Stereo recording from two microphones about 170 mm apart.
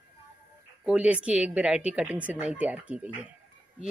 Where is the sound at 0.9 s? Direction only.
10° right (ahead or behind).